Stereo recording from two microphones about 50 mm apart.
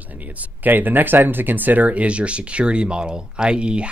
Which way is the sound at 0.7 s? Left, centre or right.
Right.